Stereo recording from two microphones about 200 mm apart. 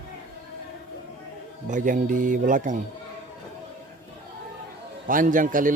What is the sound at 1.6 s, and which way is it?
Speech, 40° right (ahead or behind).